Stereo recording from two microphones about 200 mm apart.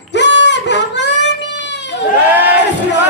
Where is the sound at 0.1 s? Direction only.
60° left (ahead or behind).